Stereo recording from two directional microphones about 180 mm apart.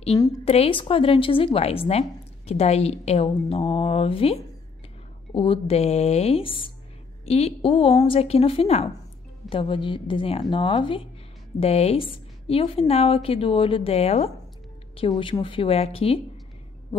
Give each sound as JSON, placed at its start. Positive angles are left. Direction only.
{"t": 0.1, "sound": "a woman's voice", "side_deg": 20}
{"t": 0.5, "sound": "a woman's voice", "side_deg": 30}